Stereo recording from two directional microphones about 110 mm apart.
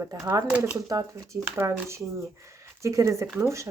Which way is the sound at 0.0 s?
35° right (ahead or behind).